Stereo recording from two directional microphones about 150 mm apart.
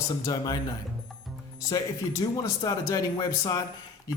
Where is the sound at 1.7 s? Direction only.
20° left (ahead or behind).